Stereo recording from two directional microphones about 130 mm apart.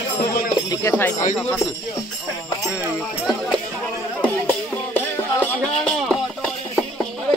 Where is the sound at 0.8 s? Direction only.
15° left (ahead or behind).